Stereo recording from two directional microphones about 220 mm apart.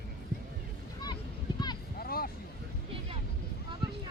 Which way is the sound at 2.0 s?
45° left (ahead or behind).